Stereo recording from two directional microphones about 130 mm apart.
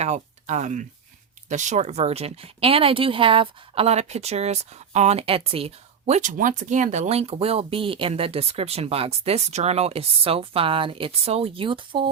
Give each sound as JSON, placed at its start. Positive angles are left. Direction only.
{"t": 0.0, "sound": "speech", "side_deg": -65}